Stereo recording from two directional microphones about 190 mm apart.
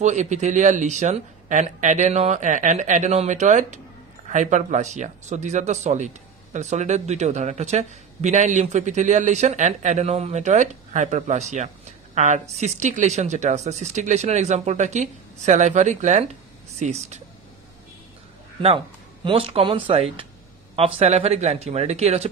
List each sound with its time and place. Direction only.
0.0 s speech: 40° right (ahead or behind)
19.2 s speech: 30° right (ahead or behind)